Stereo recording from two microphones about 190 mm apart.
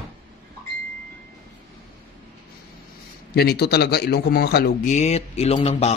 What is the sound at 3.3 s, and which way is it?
A man's voice, 55° left (ahead or behind).